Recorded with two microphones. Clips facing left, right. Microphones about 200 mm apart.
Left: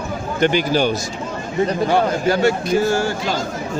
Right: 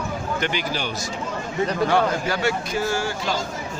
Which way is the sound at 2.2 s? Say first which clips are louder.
Left 7 dB; 45° left (ahead or behind).